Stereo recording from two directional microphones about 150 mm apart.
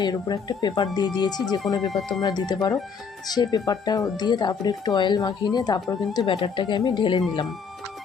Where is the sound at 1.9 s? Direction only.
Centre (ahead or behind).